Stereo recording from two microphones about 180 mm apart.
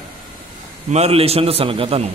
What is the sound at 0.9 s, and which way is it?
A man's voice, 35° right (ahead or behind).